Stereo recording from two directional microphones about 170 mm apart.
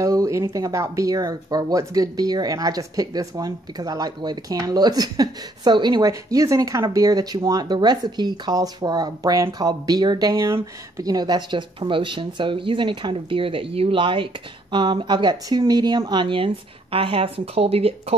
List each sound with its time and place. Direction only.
0.0 s speech: 20° right (ahead or behind); by 18.1 s 35° right (ahead or behind)